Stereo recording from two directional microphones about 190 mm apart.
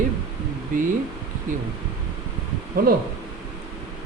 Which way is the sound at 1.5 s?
45° right (ahead or behind).